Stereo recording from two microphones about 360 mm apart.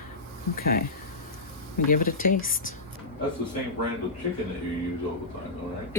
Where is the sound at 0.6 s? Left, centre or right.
Left.